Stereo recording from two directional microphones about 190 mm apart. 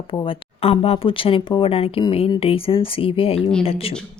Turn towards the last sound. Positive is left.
turn(degrees=30)  # may be behind; listen again after turning